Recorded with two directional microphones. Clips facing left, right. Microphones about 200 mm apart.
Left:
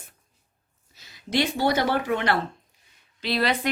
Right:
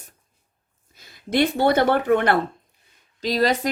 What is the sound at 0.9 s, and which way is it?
Speech, 50° right (ahead or behind).